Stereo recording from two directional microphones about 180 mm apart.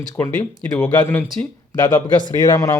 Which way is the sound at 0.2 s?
10° left (ahead or behind).